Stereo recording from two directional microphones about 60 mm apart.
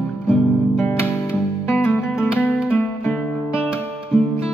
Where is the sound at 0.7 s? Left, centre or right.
Left.